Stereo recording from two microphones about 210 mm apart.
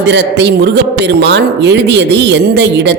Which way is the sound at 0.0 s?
55° right (ahead or behind).